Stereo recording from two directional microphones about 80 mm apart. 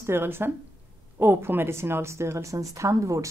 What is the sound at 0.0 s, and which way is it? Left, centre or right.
A woman's voice, right.